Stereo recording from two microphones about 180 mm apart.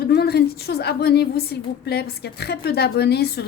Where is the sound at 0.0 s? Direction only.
60° left (ahead or behind).